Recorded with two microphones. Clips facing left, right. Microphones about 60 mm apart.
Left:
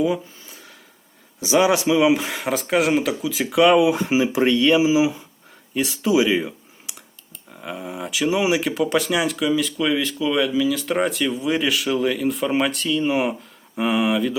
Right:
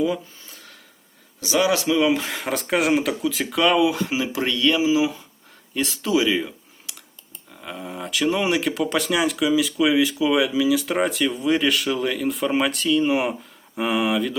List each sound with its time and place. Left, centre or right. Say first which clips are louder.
0.0 s a sound: left 2 dB; centre
1.4 s speech: left 3 dB; left
3.8 s speech: left 4 dB; left; by 14.3 s centre